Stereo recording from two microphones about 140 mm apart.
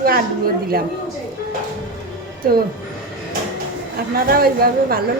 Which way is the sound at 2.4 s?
90° right.